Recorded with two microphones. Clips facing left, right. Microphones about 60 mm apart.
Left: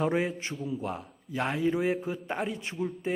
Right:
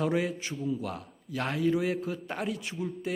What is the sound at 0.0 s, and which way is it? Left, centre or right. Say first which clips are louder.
Speech: left 1 dB; left.